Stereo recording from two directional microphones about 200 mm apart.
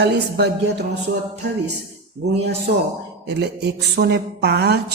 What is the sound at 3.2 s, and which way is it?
Speech, 60° right (ahead or behind).